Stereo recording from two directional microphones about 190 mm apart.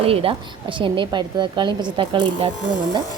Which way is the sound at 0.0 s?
30° right (ahead or behind).